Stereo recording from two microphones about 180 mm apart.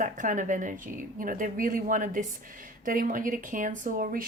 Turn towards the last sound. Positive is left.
turn(degrees=-50)  # may be behind; listen again after turning